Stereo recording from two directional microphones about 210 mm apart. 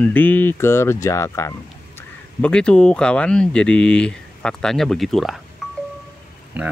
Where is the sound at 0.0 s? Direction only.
10° left (ahead or behind).